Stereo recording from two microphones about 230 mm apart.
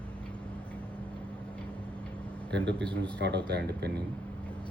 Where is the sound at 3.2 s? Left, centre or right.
Right.